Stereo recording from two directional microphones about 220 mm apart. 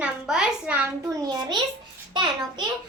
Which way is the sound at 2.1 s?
20° right (ahead or behind).